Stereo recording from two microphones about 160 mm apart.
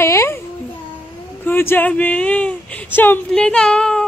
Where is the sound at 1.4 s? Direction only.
15° left (ahead or behind).